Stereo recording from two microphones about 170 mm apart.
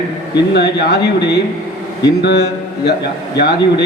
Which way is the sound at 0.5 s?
75° left (ahead or behind).